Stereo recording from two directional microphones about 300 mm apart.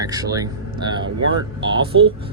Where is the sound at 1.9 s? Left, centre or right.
Right.